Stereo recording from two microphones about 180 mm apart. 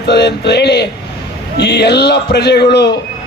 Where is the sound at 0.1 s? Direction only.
70° left (ahead or behind).